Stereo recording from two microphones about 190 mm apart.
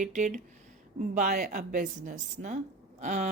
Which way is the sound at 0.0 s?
40° right (ahead or behind).